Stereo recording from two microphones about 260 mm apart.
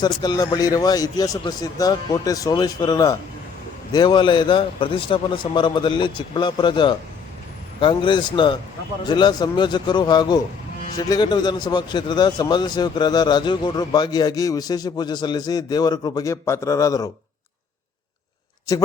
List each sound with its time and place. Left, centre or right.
0.0 s a man's voice: centre